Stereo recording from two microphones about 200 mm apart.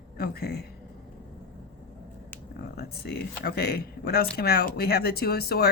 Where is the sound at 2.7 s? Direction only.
50° left (ahead or behind).